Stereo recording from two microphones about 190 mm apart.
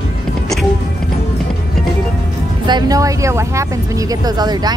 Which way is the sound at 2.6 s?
20° right (ahead or behind).